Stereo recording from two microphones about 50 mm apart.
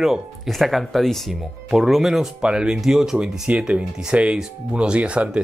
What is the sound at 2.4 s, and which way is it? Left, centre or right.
Speech, centre.